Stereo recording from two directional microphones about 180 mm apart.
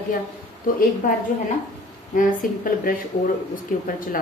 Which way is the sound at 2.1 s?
50° left (ahead or behind).